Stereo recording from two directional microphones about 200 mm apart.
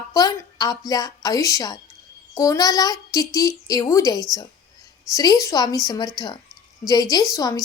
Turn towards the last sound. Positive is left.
turn(degrees=15)  # may be behind; listen again after turning